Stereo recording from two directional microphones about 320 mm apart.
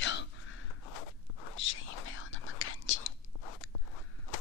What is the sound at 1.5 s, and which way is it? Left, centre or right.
Whispering, left.